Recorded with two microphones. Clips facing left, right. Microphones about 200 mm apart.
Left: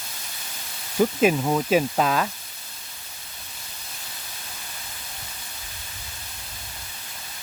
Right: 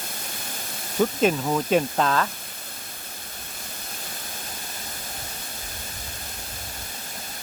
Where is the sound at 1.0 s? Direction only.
10° left (ahead or behind).